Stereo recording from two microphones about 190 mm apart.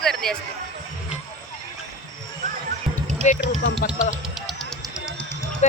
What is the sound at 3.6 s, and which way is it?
Speech, 65° left (ahead or behind).